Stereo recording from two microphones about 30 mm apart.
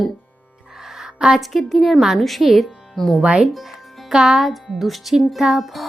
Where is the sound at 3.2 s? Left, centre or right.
Right.